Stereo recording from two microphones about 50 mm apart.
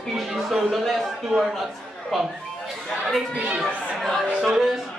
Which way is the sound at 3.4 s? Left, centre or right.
Right.